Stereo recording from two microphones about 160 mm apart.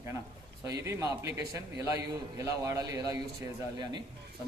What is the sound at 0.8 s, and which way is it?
A man's voice, 20° right (ahead or behind).